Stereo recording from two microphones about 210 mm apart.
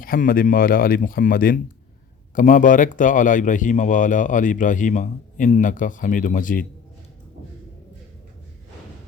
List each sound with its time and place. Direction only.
0.0 s a man's voice: 40° left (ahead or behind)